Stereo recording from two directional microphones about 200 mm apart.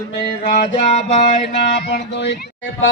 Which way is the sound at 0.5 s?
35° left (ahead or behind).